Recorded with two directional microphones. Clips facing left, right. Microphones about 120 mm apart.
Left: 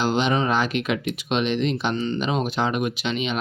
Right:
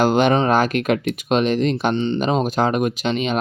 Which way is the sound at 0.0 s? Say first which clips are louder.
Right 6 dB; 50° right (ahead or behind).